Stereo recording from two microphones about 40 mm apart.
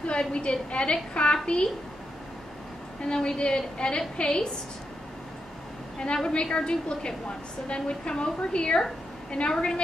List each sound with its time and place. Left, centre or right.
0.0 s a woman's voice: left
3.0 s a woman's voice: left
5.9 s a woman's voice: left